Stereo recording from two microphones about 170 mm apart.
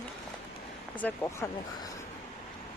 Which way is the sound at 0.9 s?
10° left (ahead or behind).